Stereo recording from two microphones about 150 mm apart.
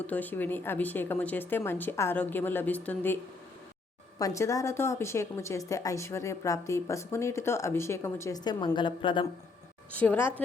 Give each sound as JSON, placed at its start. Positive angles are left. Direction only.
{"t": 0.0, "sound": "speech", "side_deg": 10}
{"t": 4.2, "sound": "speech", "side_deg": 20}
{"t": 9.9, "sound": "speech", "side_deg": 10}